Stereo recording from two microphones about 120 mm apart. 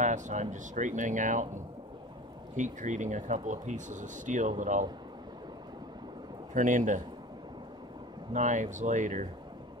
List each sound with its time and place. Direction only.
0.0 s speech: 85° right
2.5 s speech: 90° right
6.5 s speech: 90° right
8.3 s speech: 90° right